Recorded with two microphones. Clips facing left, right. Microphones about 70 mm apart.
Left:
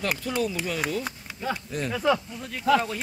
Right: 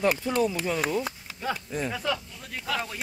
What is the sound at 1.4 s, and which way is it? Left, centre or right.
Speech, centre.